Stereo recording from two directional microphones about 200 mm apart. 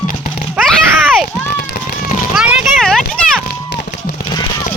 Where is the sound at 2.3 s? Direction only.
Centre (ahead or behind).